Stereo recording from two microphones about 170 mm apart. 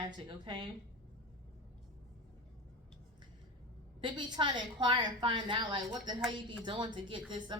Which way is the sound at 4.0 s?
25° right (ahead or behind).